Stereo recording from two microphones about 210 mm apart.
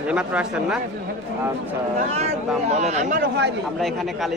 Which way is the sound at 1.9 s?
30° right (ahead or behind).